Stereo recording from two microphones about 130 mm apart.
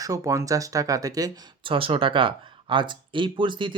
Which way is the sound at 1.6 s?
45° right (ahead or behind).